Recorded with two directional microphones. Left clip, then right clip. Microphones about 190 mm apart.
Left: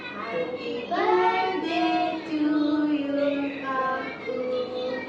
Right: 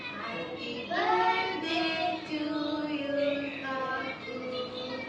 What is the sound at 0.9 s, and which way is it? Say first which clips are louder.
Child singing: left 4 dB; 10° right (ahead or behind).